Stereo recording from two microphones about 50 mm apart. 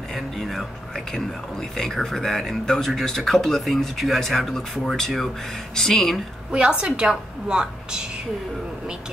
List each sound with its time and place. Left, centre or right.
0.1 s speech: centre
6.5 s a woman's voice: centre